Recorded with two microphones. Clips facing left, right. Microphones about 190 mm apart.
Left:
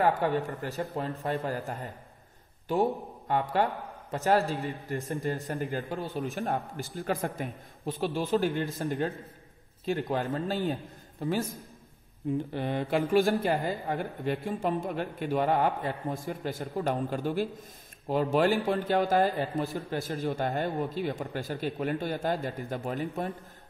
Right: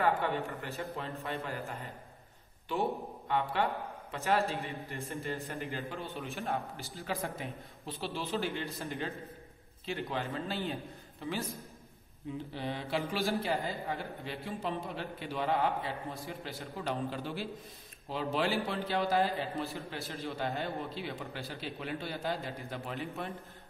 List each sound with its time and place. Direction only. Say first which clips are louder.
0.0 s a man's voice: left 5 dB; 40° left (ahead or behind)
3.3 s a man's voice: left 4 dB; 45° left (ahead or behind)
5.7 s a man's voice: left 6 dB; 50° left (ahead or behind)
5.9 s a man's voice: left 7 dB; 35° left (ahead or behind)
6.4 s a man's voice: left 5 dB; 50° left (ahead or behind)